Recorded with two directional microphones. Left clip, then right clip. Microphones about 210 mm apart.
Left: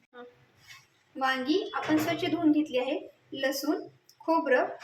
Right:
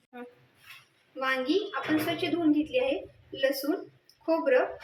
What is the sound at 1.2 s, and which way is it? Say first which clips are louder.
Speech: even; 40° left (ahead or behind).